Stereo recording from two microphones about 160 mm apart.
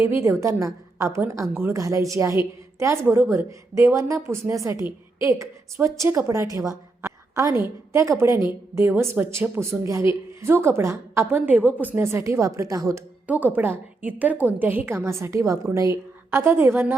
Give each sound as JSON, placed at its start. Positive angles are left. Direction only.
{"t": 0.0, "sound": "a woman's voice", "side_deg": -15}
{"t": 13.2, "sound": "a woman's voice", "side_deg": -10}